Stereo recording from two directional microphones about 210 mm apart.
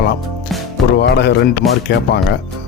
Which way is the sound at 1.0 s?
55° left (ahead or behind).